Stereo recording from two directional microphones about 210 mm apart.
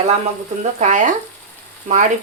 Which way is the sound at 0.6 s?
35° right (ahead or behind).